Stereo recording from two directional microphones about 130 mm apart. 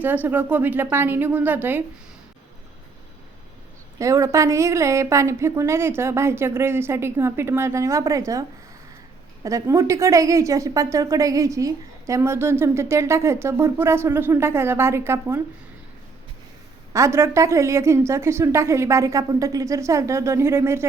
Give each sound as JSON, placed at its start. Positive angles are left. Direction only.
{"t": 0.0, "sound": "a woman's voice", "side_deg": -15}
{"t": 3.9, "sound": "a woman's voice", "side_deg": -25}
{"t": 16.9, "sound": "a woman's voice", "side_deg": -20}